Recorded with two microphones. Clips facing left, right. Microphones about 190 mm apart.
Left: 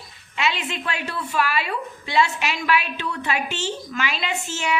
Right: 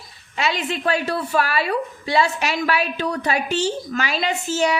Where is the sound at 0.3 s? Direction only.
40° right (ahead or behind).